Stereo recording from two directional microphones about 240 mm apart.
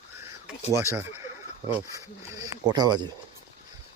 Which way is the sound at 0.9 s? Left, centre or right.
Centre.